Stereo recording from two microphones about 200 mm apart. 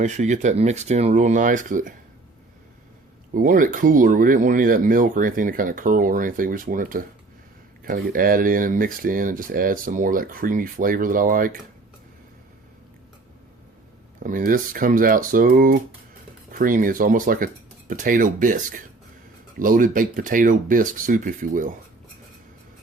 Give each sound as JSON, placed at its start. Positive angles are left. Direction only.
{"t": 0.0, "sound": "speech", "side_deg": -35}
{"t": 3.3, "sound": "speech", "side_deg": -45}
{"t": 14.2, "sound": "speech", "side_deg": -45}